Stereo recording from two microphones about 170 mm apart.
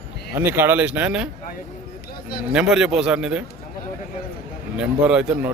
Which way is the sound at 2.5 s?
5° right (ahead or behind).